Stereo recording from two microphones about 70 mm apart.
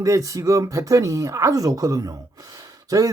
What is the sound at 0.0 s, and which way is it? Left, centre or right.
Speech, right.